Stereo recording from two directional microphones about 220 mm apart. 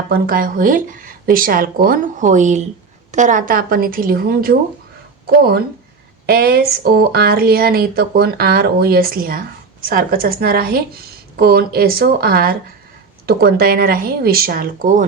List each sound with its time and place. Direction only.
0.1 s speech: 40° right (ahead or behind)